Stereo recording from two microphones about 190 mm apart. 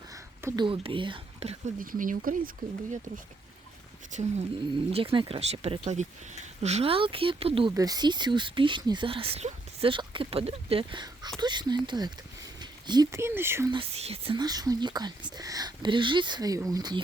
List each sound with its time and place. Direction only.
0.1 s speech: 20° right (ahead or behind)
1.8 s speech: 45° right (ahead or behind)
4.1 s speech: 40° right (ahead or behind)
7.7 s speech: 20° right (ahead or behind)
13.7 s speech: 30° right (ahead or behind)